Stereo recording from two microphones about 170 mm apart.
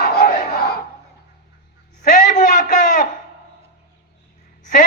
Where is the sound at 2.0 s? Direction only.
45° left (ahead or behind).